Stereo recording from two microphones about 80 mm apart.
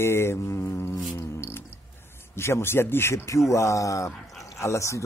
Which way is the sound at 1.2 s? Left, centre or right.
Left.